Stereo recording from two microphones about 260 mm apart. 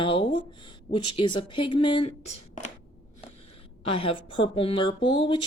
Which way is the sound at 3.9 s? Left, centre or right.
Left.